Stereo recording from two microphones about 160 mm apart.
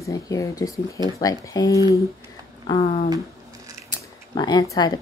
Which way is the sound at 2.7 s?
40° left (ahead or behind).